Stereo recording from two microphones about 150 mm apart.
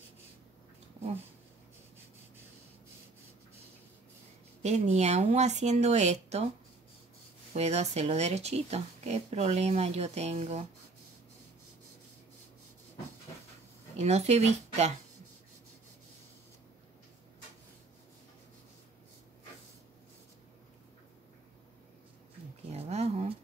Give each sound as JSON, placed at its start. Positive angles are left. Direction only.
{"t": 4.6, "sound": "speech", "side_deg": -45}
{"t": 7.5, "sound": "speech", "side_deg": -45}
{"t": 13.9, "sound": "speech", "side_deg": -45}
{"t": 22.7, "sound": "a sound", "side_deg": -45}